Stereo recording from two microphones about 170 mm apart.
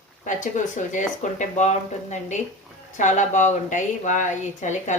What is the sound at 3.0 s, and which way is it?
Speech, 45° left (ahead or behind).